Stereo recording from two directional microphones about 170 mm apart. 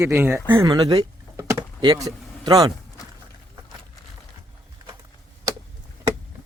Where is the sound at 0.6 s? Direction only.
25° right (ahead or behind).